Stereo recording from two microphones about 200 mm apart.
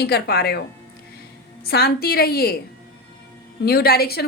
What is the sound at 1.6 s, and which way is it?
Speech, 50° left (ahead or behind).